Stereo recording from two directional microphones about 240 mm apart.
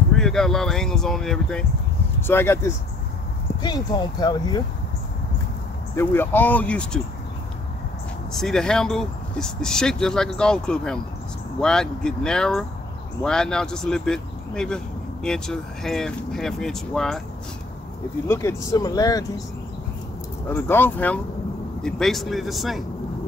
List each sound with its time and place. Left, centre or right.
0.1 s speech: centre
5.9 s speech: centre
8.3 s speech: centre
18.3 s speech: centre
20.4 s speech: centre